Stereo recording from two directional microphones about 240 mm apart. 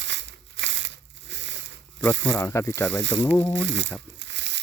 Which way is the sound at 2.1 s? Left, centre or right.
Right.